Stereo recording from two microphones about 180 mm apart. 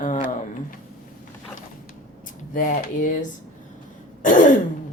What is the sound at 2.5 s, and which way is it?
Speech, 50° left (ahead or behind).